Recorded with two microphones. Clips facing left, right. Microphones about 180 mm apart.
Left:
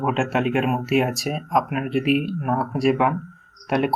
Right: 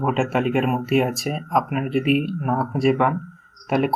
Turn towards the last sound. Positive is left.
turn(degrees=0)  # may be behind; listen again after turning